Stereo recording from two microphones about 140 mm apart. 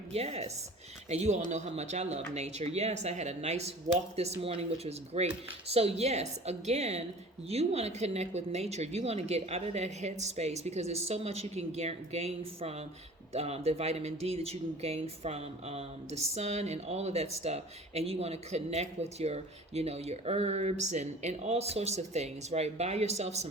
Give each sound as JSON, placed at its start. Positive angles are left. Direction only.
{"t": 0.1, "sound": "speech", "side_deg": -50}